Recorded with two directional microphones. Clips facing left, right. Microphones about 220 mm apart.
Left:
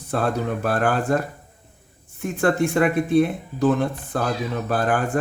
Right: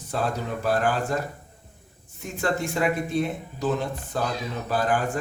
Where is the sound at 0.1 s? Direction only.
55° left (ahead or behind).